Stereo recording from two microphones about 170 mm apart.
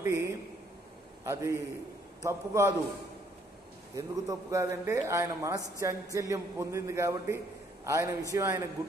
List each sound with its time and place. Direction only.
0.0 s a sound: 15° right (ahead or behind)
1.2 s a man's voice: 15° right (ahead or behind)
3.9 s a man's voice: 20° right (ahead or behind)